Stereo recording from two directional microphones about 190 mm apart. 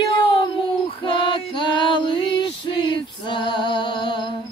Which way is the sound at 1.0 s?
25° left (ahead or behind).